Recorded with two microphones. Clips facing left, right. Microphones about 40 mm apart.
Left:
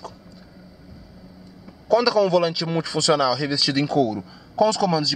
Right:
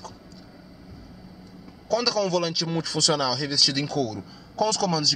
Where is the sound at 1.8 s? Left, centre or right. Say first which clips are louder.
Left 6 dB; centre.